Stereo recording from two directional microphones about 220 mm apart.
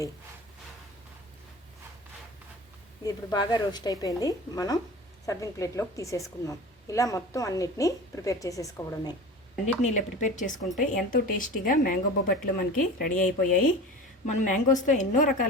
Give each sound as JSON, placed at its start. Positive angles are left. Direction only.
{"t": 3.0, "sound": "a woman's voice", "side_deg": 15}
{"t": 9.8, "sound": "speech", "side_deg": 35}